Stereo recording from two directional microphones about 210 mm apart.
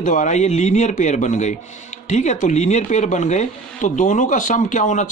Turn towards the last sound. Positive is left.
turn(degrees=35)  # may be behind; listen again after turning